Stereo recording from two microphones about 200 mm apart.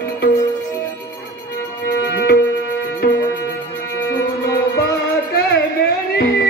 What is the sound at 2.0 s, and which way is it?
Music, 50° left (ahead or behind).